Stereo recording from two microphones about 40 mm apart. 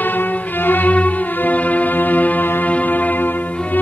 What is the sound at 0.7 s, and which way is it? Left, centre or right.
Music, left.